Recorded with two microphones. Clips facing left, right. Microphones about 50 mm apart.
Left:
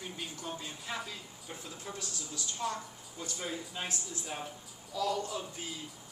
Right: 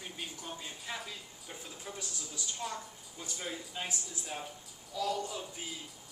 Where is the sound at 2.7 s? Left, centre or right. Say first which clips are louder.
Left 2 dB; centre.